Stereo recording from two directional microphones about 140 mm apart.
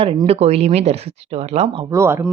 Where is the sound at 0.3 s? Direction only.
50° right (ahead or behind).